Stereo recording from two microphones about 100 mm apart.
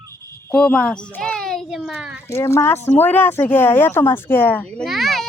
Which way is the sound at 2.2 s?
25° left (ahead or behind).